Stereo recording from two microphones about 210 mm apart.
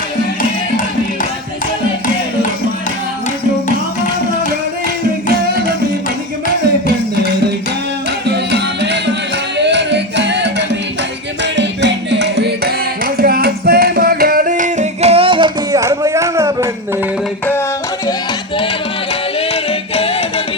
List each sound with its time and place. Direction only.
8.3 s music: 55° right (ahead or behind)
9.6 s singing: 55° right (ahead or behind)
11.5 s music: 55° right (ahead or behind); by 16.6 s 15° right (ahead or behind)